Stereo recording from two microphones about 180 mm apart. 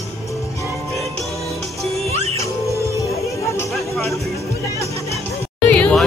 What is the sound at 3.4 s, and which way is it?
Chatter, 15° left (ahead or behind).